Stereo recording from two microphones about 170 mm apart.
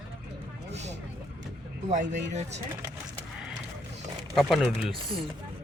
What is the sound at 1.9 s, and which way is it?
Speech, 45° right (ahead or behind).